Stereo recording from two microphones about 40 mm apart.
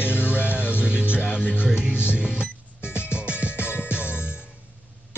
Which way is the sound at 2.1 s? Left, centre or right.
Right.